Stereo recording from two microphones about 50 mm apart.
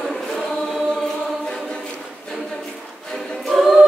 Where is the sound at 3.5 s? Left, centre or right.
Centre.